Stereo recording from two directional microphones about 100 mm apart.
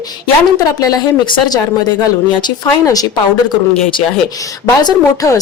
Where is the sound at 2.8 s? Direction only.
35° left (ahead or behind).